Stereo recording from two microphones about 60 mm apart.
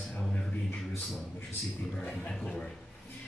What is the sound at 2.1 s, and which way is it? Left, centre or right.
Speech, centre.